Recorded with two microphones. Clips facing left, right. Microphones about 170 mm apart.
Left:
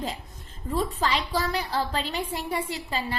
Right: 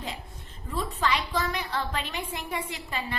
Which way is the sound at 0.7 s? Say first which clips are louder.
Left 2 dB; 35° left (ahead or behind).